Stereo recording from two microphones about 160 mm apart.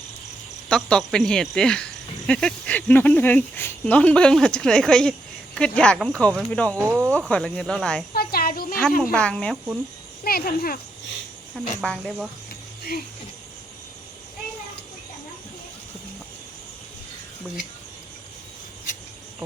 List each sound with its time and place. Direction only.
0.7 s speech: 5° left (ahead or behind)
6.8 s speech: 15° right (ahead or behind)
7.3 s speech: 5° left (ahead or behind)
8.1 s a sound: 70° left (ahead or behind)
9.1 s speech: 5° left (ahead or behind)
10.2 s speech: 70° left (ahead or behind)
11.5 s speech: centre (ahead or behind)